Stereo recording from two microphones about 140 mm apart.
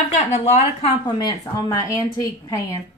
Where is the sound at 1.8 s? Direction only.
20° left (ahead or behind).